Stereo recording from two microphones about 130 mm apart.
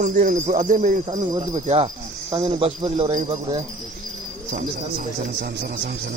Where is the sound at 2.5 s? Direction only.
45° right (ahead or behind).